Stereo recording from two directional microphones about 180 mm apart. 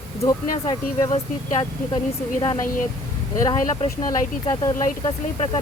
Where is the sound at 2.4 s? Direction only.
25° left (ahead or behind).